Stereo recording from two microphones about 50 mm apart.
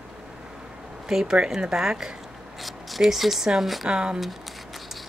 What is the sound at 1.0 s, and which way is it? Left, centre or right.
Speech, centre.